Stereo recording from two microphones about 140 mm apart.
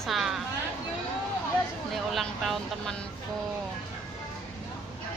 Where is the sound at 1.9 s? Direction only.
Centre (ahead or behind).